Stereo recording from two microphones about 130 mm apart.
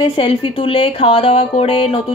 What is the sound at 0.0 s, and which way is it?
A woman's voice, 45° left (ahead or behind).